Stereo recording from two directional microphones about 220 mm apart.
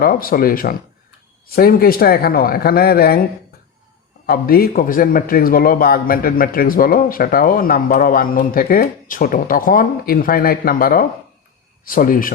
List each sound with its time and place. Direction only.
0.0 s a man's voice: 40° left (ahead or behind)
4.3 s a man's voice: 40° left (ahead or behind)